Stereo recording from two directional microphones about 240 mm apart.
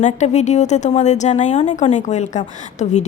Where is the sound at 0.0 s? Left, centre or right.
Left.